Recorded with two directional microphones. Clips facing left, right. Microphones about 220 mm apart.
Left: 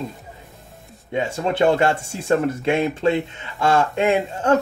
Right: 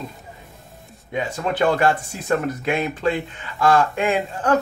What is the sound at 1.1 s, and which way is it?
Speech, 25° left (ahead or behind).